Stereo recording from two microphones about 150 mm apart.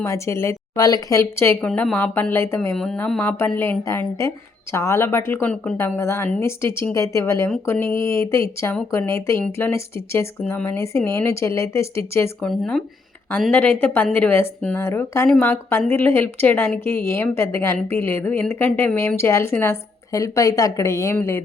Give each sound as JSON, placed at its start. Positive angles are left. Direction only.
{"t": 0.0, "sound": "speech", "side_deg": 20}
{"t": 2.7, "sound": "speech", "side_deg": 5}
{"t": 12.4, "sound": "speech", "side_deg": 5}